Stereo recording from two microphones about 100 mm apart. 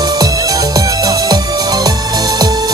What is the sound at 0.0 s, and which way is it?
Music, 40° right (ahead or behind).